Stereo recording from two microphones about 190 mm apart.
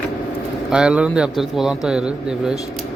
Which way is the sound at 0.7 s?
5° right (ahead or behind).